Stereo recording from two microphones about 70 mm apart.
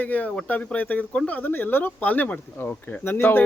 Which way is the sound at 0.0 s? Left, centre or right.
Left.